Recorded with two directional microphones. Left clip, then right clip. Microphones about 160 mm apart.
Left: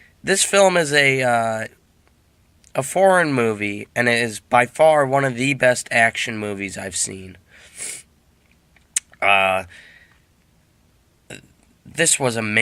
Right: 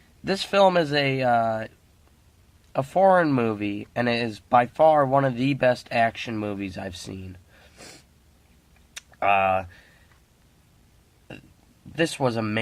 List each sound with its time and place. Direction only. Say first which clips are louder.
0.3 s speech: left 4 dB; 15° left (ahead or behind)
2.7 s speech: left 3 dB; 15° left (ahead or behind)
8.9 s computer keyboard: left 5 dB; 10° left (ahead or behind)
11.9 s speech: left 5 dB; 10° left (ahead or behind)